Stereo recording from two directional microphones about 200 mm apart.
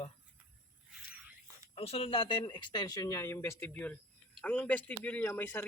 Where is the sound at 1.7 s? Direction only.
30° left (ahead or behind).